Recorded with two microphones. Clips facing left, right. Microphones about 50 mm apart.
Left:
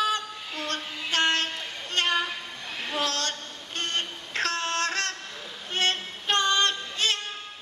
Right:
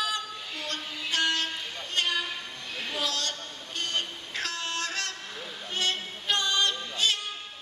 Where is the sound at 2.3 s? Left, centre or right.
Centre.